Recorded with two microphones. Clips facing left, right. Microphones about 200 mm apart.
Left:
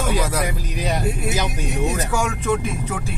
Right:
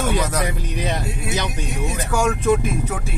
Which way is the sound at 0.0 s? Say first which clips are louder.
Right 1 dB; 5° left (ahead or behind).